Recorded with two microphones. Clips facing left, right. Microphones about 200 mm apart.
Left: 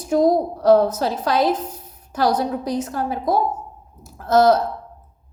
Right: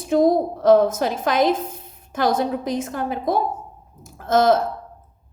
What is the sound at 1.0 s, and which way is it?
A woman's voice, 20° right (ahead or behind).